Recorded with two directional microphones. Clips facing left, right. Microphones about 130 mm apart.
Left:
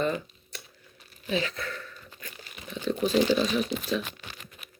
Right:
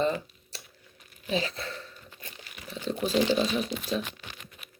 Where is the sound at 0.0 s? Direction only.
30° right (ahead or behind).